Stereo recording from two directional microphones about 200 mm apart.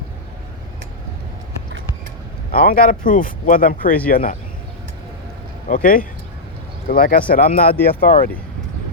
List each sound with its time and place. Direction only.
2.5 s speech: 45° left (ahead or behind)
5.6 s speech: 40° left (ahead or behind)